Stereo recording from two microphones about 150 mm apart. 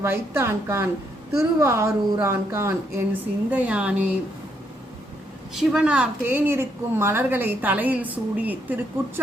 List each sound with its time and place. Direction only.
0.0 s a woman's voice: 15° right (ahead or behind)
5.5 s a woman's voice: 5° right (ahead or behind)